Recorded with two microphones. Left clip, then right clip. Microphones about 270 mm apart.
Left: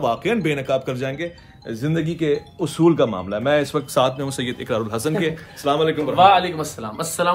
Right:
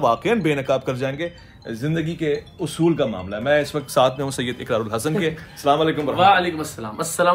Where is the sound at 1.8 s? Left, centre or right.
Centre.